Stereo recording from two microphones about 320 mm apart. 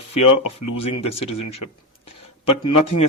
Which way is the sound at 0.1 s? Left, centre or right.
Left.